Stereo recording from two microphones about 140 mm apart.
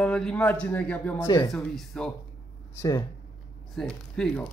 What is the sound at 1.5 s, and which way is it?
Speech, 5° left (ahead or behind).